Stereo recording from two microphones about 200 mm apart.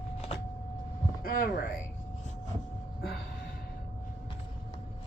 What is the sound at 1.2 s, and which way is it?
Speech, 45° left (ahead or behind).